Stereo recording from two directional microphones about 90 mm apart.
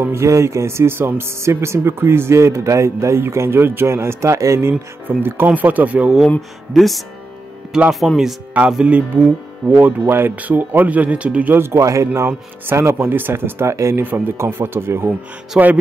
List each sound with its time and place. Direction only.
0.1 s speech: 35° right (ahead or behind); by 6.1 s 15° right (ahead or behind)
6.7 s speech: centre (ahead or behind); by 11.5 s 15° right (ahead or behind)
11.5 s speech: 30° right (ahead or behind)
15.5 s speech: 15° right (ahead or behind)